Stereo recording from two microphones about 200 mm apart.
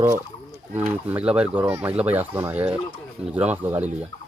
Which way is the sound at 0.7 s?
10° right (ahead or behind).